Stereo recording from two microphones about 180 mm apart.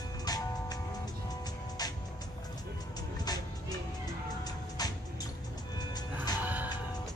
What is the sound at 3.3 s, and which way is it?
Music, 20° left (ahead or behind).